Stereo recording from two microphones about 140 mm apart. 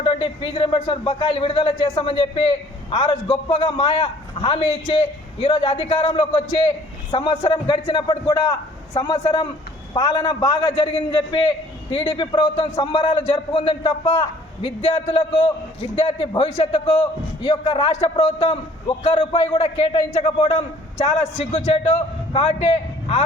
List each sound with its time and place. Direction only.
0.0 s speech: 40° left (ahead or behind)
17.4 s a man's voice: 35° left (ahead or behind)